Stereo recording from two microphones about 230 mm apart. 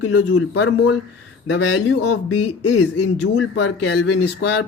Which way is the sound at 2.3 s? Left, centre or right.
Left.